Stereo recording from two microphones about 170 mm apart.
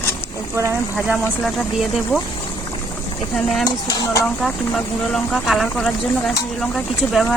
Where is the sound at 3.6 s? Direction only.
20° left (ahead or behind).